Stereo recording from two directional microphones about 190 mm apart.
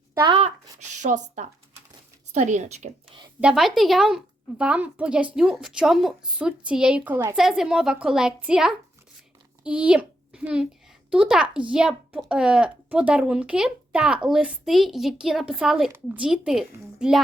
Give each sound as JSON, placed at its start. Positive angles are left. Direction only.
{"t": 0.1, "sound": "a sound", "side_deg": -15}
{"t": 0.3, "sound": "a woman's voice", "side_deg": -35}
{"t": 3.4, "sound": "a woman's voice", "side_deg": 0}